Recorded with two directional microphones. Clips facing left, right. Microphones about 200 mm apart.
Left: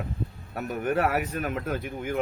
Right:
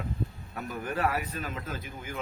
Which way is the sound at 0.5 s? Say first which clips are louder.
Left 8 dB; 65° left (ahead or behind).